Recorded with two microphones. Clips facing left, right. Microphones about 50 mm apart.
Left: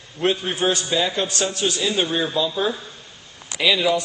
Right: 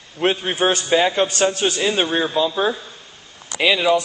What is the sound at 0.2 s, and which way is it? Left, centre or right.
A man's voice, right.